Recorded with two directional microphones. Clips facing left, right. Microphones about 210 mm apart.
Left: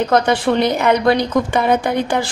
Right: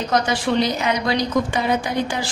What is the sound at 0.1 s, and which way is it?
A woman's voice, 60° left (ahead or behind).